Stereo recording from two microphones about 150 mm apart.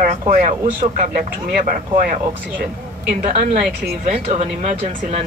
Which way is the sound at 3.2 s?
65° right (ahead or behind).